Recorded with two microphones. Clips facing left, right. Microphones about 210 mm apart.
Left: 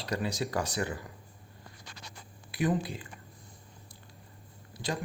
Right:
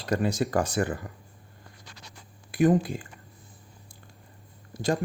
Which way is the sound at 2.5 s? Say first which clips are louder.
Right 8 dB; 45° right (ahead or behind).